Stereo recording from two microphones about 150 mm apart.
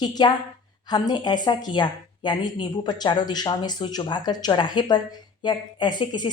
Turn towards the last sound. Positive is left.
turn(degrees=30)  # may be behind; listen again after turning